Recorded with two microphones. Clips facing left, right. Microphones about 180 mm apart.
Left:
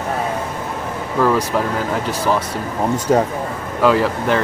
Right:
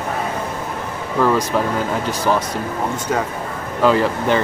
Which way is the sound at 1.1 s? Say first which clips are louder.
Even; centre (ahead or behind).